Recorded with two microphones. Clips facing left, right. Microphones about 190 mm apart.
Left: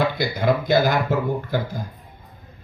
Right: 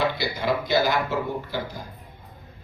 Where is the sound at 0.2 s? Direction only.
50° left (ahead or behind).